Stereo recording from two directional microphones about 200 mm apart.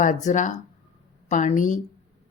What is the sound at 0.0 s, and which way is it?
A woman's voice, 40° left (ahead or behind).